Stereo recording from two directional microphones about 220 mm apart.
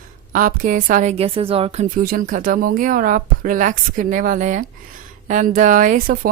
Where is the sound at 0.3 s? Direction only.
40° right (ahead or behind).